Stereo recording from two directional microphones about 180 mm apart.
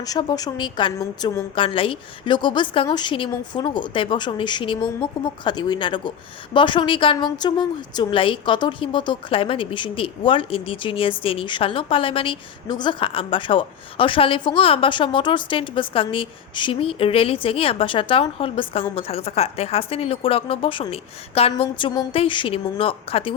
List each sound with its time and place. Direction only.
0.0 s a woman's voice: 20° left (ahead or behind)